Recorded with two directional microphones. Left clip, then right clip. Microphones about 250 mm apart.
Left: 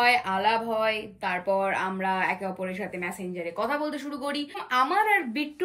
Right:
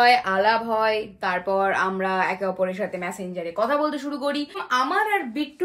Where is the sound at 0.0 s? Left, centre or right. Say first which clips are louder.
Right 5 dB; centre.